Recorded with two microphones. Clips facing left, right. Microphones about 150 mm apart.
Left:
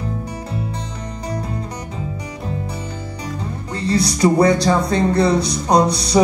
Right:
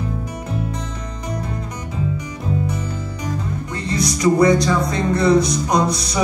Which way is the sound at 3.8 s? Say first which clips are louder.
Left 5 dB; 30° left (ahead or behind).